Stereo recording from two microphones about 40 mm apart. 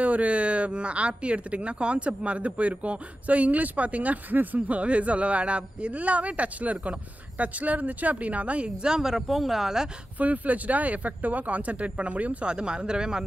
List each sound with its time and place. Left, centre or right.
0.0 s speech: right
4.6 s speech: right
8.8 s speech: centre
10.1 s speech: right
12.4 s speech: right